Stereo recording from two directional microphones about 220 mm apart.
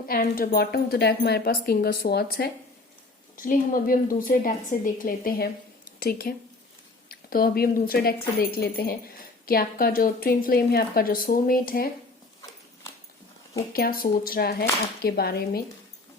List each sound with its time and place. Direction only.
0.1 s speech: 40° left (ahead or behind)
13.7 s speech: 40° left (ahead or behind)